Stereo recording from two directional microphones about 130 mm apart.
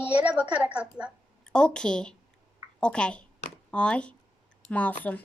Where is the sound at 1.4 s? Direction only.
5° left (ahead or behind).